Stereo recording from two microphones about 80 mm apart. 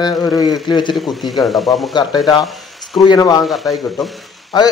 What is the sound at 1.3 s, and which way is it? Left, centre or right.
Speech, centre.